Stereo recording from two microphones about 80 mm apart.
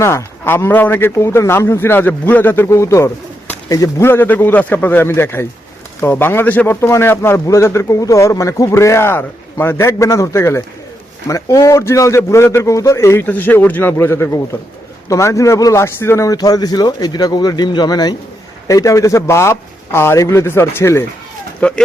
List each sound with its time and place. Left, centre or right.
0.0 s speech: left
2.6 s a man's voice: left
4.0 s speech: left
13.2 s a man's voice: left
15.8 s speech: left
18.7 s speech: left
21.6 s speech: centre